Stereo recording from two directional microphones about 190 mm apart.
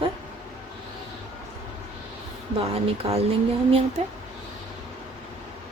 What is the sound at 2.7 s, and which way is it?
Speech, 30° right (ahead or behind).